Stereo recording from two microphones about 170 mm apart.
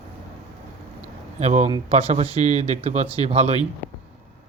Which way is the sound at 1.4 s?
40° right (ahead or behind).